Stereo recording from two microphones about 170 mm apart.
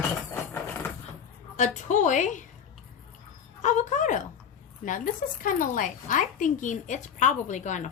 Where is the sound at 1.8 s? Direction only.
45° left (ahead or behind).